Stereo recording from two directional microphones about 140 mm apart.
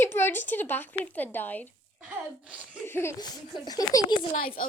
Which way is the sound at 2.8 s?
15° left (ahead or behind).